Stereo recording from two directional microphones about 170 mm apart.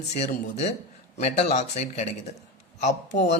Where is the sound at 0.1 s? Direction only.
40° left (ahead or behind).